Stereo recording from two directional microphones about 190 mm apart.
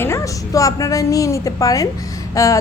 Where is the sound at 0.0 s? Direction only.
15° left (ahead or behind).